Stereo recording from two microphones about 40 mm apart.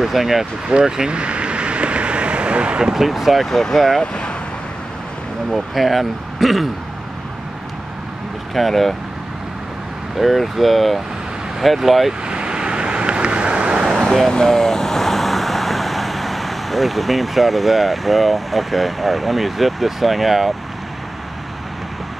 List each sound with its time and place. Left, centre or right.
0.0 s speech: centre
0.7 s vehicle: centre
3.1 s speech: centre
4.0 s speech: centre
5.5 s speech: centre
8.5 s speech: centre
10.1 s speech: centre
12.1 s vehicle: right
14.0 s vehicle: centre
14.3 s speech: centre